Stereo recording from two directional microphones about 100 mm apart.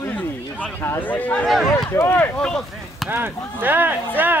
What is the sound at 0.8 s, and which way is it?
Speech, 20° left (ahead or behind).